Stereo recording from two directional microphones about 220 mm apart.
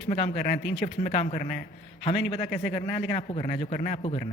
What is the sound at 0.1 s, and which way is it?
A man's voice, 30° left (ahead or behind).